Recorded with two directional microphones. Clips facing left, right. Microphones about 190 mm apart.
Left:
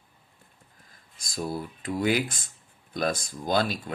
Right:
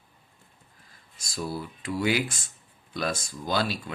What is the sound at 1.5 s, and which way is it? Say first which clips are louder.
Speech: left 1 dB; 45° left (ahead or behind).